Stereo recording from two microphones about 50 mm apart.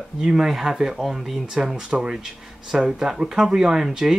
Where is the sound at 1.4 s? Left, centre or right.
Centre.